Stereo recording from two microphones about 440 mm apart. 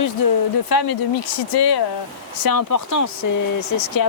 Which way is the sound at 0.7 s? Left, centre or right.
Left.